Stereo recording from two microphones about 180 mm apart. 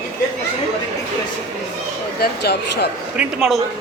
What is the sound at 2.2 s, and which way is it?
Speech, 65° left (ahead or behind).